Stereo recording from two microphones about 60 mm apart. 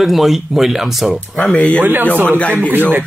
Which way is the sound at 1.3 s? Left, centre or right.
Centre.